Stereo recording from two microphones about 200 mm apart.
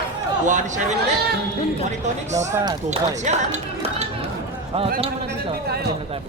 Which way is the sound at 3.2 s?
35° right (ahead or behind).